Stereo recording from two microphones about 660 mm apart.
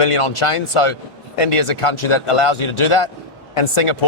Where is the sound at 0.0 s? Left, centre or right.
Left.